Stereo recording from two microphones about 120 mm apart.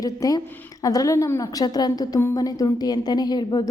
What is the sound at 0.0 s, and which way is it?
A woman's voice, 30° left (ahead or behind).